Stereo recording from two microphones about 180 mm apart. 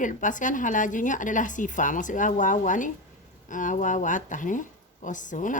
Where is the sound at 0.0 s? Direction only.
45° left (ahead or behind).